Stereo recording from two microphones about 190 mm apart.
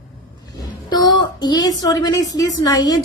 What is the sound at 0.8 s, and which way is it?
A woman's voice, 20° left (ahead or behind).